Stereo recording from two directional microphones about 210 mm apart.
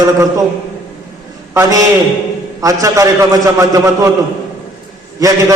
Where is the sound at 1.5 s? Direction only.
15° right (ahead or behind).